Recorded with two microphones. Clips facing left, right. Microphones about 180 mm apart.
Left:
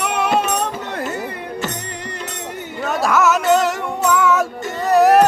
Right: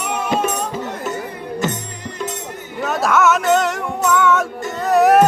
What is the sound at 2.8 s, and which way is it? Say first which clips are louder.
Music: right 1 dB; centre (ahead or behind).